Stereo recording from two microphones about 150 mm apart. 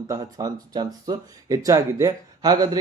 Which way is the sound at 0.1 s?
25° right (ahead or behind).